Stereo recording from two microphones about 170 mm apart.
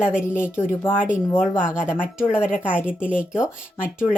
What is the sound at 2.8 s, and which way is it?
Speech, 5° right (ahead or behind).